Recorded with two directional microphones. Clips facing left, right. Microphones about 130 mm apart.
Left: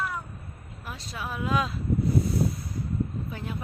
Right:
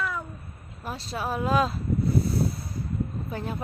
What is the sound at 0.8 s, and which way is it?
Speech, 35° right (ahead or behind).